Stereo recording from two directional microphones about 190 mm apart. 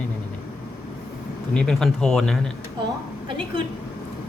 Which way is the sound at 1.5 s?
Centre (ahead or behind).